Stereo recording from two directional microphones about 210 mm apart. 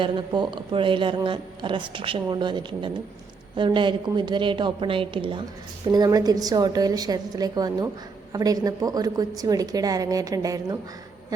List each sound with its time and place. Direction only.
0.0 s a woman's voice: 20° right (ahead or behind)